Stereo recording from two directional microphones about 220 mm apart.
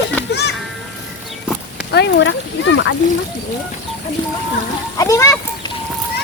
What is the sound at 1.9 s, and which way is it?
Speech, 50° left (ahead or behind).